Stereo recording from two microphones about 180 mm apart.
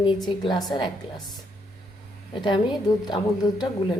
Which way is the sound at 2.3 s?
25° left (ahead or behind).